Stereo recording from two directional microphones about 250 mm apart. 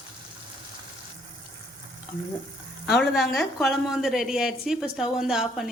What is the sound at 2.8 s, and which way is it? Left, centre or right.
A woman's voice, centre.